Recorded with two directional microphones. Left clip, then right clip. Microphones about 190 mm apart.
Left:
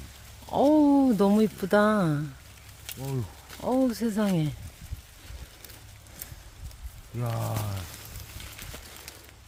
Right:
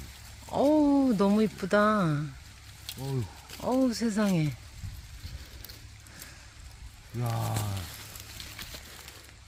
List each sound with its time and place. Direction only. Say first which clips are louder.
0.4 s speech: left 3 dB; 15° left (ahead or behind)
3.6 s speech: left 2 dB; 5° left (ahead or behind)
7.2 s speech: left 1 dB; 35° left (ahead or behind)